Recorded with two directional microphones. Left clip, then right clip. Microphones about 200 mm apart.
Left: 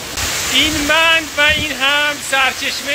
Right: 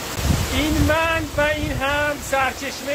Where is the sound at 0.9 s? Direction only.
15° left (ahead or behind).